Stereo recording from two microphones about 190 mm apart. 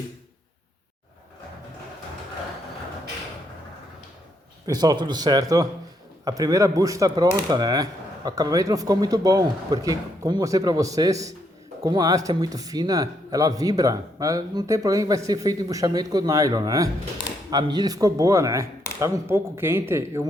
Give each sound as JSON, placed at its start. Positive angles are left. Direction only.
{"t": 4.6, "sound": "speech", "side_deg": -20}